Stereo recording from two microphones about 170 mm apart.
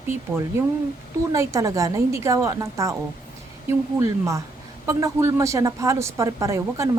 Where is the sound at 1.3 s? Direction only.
20° right (ahead or behind).